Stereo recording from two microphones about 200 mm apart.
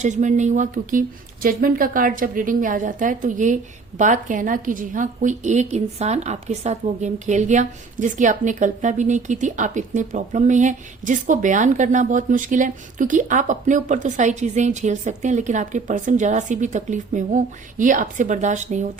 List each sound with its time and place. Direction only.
0.0 s speech: 35° right (ahead or behind)